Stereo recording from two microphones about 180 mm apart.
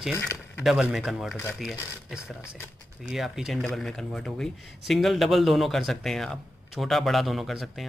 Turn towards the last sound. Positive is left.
turn(degrees=0)  # may be behind; listen again after turning